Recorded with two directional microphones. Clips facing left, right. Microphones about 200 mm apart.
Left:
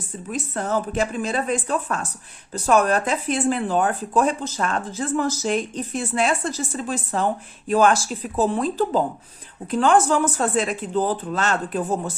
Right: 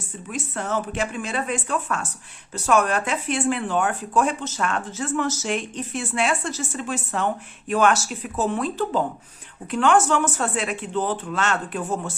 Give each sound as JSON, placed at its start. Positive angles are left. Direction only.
{"t": 0.3, "sound": "speech", "side_deg": 35}